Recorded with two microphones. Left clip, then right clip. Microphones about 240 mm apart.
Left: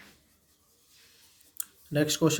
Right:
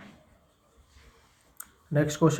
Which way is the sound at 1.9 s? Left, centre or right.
Left.